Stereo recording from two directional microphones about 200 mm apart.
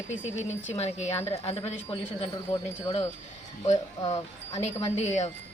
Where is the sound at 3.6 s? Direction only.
35° left (ahead or behind).